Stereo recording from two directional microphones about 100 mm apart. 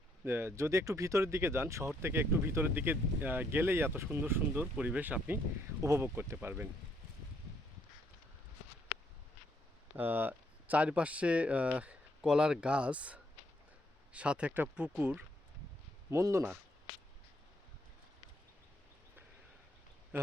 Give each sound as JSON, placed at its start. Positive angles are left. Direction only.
{"t": 0.3, "sound": "speech", "side_deg": -25}
{"t": 5.8, "sound": "speech", "side_deg": -30}
{"t": 10.0, "sound": "speech", "side_deg": -20}
{"t": 16.0, "sound": "speech", "side_deg": -30}